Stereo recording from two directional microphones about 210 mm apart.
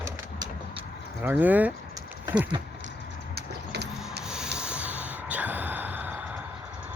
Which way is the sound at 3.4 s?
55° right (ahead or behind).